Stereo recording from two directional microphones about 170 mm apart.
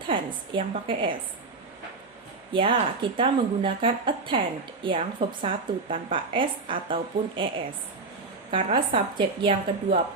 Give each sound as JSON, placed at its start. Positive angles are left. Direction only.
{"t": 0.1, "sound": "speech", "side_deg": -30}
{"t": 2.5, "sound": "speech", "side_deg": -30}